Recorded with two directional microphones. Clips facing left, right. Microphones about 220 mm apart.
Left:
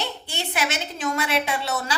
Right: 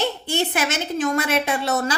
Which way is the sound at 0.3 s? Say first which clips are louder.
Right 4 dB; 50° right (ahead or behind).